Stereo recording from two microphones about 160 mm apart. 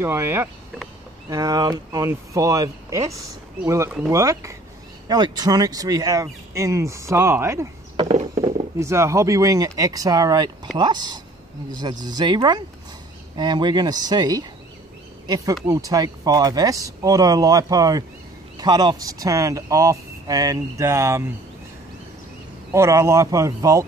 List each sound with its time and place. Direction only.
0.0 s speech: 15° right (ahead or behind)
8.0 s a sound: 35° right (ahead or behind)
8.7 s speech: 20° right (ahead or behind)
22.7 s speech: 20° right (ahead or behind)